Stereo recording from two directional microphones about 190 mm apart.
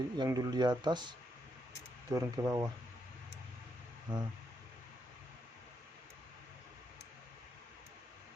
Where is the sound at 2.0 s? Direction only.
15° right (ahead or behind).